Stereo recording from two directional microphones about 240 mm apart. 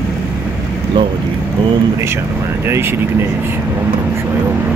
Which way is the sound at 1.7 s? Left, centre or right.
Centre.